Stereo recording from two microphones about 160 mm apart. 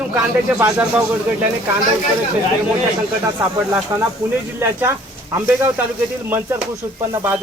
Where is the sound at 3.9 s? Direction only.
15° right (ahead or behind).